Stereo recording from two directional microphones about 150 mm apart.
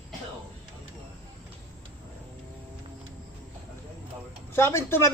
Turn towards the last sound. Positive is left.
turn(degrees=15)  # may be behind; listen again after turning